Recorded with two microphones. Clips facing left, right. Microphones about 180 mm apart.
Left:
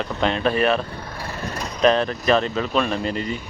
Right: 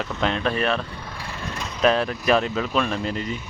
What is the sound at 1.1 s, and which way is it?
Vehicle, 40° left (ahead or behind).